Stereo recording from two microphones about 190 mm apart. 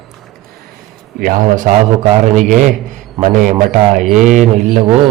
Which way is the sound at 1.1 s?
45° right (ahead or behind).